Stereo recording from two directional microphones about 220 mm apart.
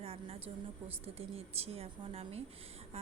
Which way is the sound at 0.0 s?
25° right (ahead or behind).